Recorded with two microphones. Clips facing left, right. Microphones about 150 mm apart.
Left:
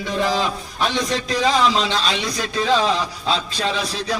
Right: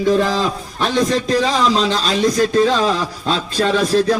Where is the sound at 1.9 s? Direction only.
40° right (ahead or behind).